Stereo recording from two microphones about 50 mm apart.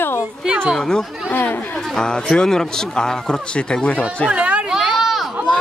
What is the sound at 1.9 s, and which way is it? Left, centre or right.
Speech, centre.